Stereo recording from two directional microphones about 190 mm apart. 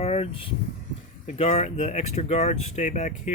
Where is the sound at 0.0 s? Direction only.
35° left (ahead or behind).